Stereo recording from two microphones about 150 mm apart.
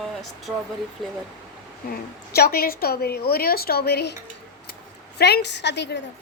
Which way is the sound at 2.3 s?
90° left.